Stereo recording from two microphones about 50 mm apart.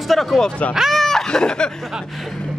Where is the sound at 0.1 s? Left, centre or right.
Centre.